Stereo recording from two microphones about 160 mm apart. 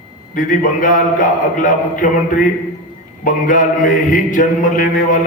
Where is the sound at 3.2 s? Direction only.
55° left (ahead or behind).